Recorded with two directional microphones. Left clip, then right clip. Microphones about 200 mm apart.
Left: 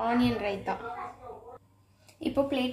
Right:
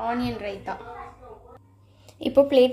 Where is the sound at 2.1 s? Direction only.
30° right (ahead or behind).